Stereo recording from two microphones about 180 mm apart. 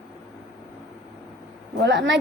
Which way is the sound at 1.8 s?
75° right (ahead or behind).